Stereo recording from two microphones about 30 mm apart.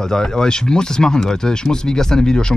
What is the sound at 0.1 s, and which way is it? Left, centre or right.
Speech, left.